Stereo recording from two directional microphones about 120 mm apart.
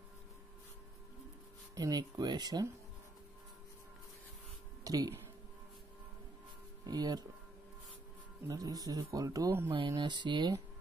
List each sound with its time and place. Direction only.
1.8 s speech: 35° right (ahead or behind)
4.8 s speech: 30° right (ahead or behind)
6.9 s speech: 35° right (ahead or behind)
8.5 s speech: 30° right (ahead or behind)
9.7 s speech: 40° right (ahead or behind)